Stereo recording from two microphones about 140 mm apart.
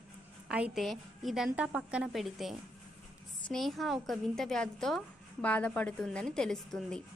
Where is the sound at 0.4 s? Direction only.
10° right (ahead or behind).